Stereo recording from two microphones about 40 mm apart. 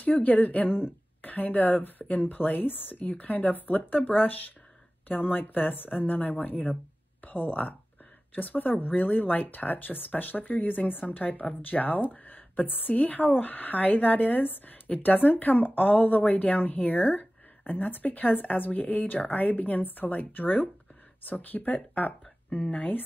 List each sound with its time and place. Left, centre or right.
0.0 s speech: left
0.7 s speech: left
1.2 s speech: left